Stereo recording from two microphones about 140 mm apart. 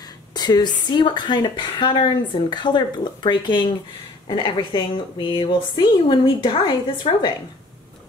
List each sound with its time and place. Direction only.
0.3 s speech: 30° left (ahead or behind)